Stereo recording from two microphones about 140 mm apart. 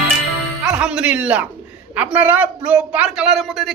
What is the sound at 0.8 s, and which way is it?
Speech, 5° right (ahead or behind).